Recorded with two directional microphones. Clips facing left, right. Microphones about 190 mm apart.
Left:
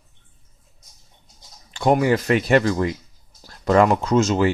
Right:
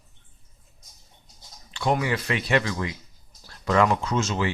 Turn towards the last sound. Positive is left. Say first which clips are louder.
# left 8 dB
turn(degrees=40)  # may be behind; listen again after turning